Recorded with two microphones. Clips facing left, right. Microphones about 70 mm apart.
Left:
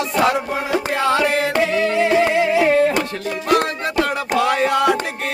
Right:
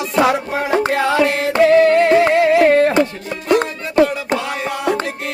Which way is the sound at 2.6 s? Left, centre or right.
Right.